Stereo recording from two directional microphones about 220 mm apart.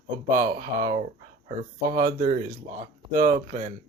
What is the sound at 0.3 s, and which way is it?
Speech, 40° right (ahead or behind).